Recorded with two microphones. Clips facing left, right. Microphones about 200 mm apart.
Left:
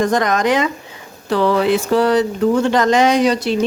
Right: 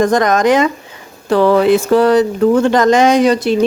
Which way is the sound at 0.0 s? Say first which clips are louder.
Right 4 dB; 45° right (ahead or behind).